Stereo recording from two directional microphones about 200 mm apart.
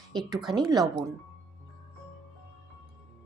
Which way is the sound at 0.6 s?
20° right (ahead or behind).